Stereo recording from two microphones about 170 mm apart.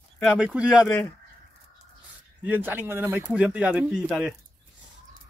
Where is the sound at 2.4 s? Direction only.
10° right (ahead or behind).